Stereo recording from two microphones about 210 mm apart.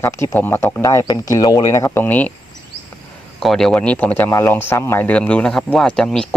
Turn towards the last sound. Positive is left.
turn(degrees=5)  # may be behind; listen again after turning